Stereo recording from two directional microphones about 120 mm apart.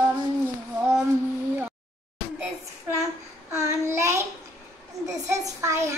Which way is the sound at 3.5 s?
25° right (ahead or behind).